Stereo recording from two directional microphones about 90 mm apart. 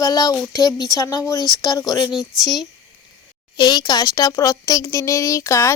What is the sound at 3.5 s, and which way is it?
Speech, 50° left (ahead or behind).